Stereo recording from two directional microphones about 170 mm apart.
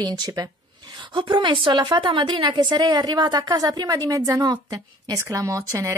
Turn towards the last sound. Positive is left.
turn(degrees=-20)  # may be behind; listen again after turning